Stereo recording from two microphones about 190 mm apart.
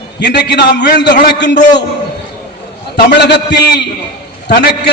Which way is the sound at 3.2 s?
60° left (ahead or behind).